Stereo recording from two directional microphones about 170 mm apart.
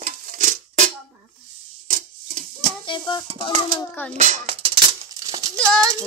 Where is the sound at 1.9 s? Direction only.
50° right (ahead or behind).